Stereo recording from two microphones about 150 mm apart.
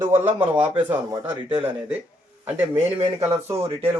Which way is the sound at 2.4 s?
10° right (ahead or behind).